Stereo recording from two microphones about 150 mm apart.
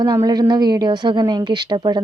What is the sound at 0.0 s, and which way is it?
Speech, 25° right (ahead or behind).